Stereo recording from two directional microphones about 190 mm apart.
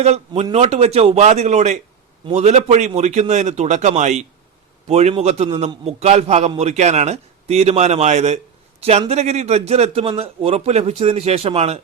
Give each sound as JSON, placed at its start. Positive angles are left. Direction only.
{"t": 0.0, "sound": "a man's voice", "side_deg": -35}